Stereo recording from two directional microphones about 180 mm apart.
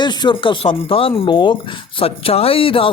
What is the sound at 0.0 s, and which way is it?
Speech, 25° left (ahead or behind).